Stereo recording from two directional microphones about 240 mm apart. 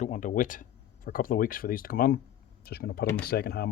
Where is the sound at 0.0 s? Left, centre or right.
Left.